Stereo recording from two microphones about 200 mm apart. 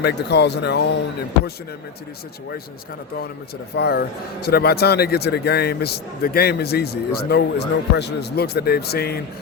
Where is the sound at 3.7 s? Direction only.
55° left (ahead or behind).